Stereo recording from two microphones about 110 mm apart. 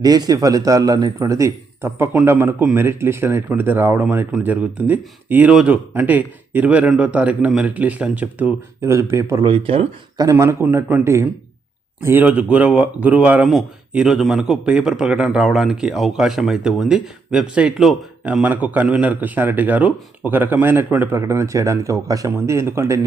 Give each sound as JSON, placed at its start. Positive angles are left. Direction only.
{"t": 0.0, "sound": "a man's voice", "side_deg": -35}
{"t": 8.8, "sound": "speech", "side_deg": -25}
{"t": 9.4, "sound": "speech", "side_deg": -50}
{"t": 10.2, "sound": "speech", "side_deg": -30}
{"t": 12.0, "sound": "a man's voice", "side_deg": -15}